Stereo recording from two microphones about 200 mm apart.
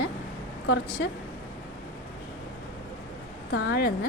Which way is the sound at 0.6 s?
60° left (ahead or behind).